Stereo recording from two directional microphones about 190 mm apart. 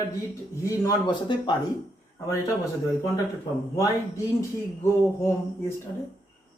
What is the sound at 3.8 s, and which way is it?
Speech, 15° left (ahead or behind).